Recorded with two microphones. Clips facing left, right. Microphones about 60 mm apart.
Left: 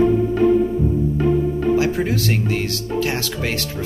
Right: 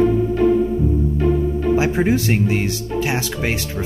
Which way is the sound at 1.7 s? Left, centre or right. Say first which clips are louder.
Right 4 dB; right.